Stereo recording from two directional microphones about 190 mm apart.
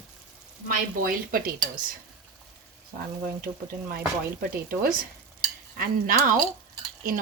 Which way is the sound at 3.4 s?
55° right (ahead or behind).